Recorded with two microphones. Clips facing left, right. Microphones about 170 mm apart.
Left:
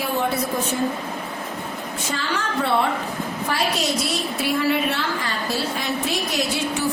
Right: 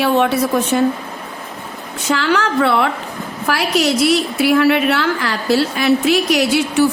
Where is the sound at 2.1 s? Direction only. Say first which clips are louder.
Right 11 dB; 80° right.